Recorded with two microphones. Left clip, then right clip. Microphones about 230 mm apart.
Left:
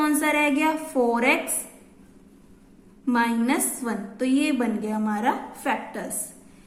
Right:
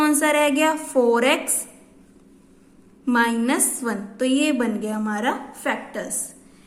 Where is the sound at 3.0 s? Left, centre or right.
Centre.